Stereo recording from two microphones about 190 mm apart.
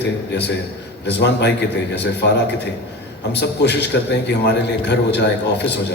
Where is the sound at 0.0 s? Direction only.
65° left (ahead or behind).